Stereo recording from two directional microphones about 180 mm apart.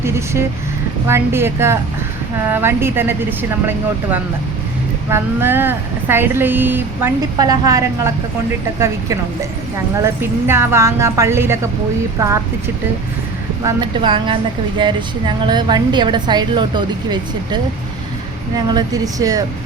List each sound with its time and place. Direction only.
0.0 s speech: 15° right (ahead or behind)
13.7 s a woman's voice: 25° right (ahead or behind)
18.7 s a woman's voice: 20° right (ahead or behind)